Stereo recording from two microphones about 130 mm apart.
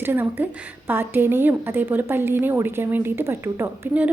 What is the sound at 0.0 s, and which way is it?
A woman's voice, 15° right (ahead or behind).